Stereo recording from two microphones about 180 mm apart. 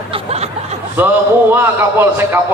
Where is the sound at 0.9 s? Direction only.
10° right (ahead or behind).